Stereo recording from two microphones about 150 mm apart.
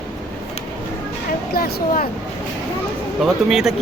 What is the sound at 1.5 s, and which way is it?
Speech, 75° left (ahead or behind).